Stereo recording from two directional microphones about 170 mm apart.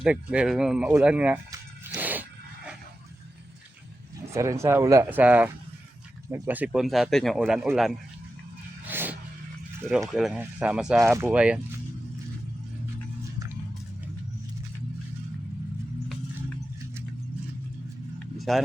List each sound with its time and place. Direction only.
0.0 s speech: 5° right (ahead or behind)
1.9 s a sound: 10° right (ahead or behind)
4.3 s speech: 15° right (ahead or behind)
8.9 s a sound: 10° right (ahead or behind)
10.1 s speech: centre (ahead or behind)
11.0 s speech: 15° right (ahead or behind)
18.2 s vehicle: centre (ahead or behind)